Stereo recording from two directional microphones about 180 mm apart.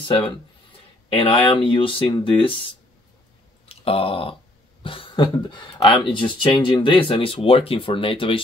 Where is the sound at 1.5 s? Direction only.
30° left (ahead or behind).